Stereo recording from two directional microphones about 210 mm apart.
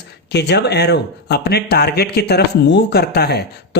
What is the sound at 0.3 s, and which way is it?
Speech, 55° left (ahead or behind).